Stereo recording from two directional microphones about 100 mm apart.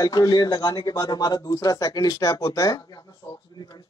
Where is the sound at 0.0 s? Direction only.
40° left (ahead or behind).